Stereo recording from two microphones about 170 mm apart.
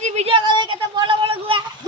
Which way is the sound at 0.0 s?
40° right (ahead or behind).